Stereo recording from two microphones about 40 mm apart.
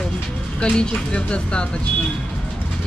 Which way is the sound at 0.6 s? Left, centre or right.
Left.